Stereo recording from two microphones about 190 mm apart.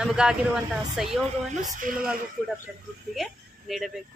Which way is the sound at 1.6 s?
45° right (ahead or behind).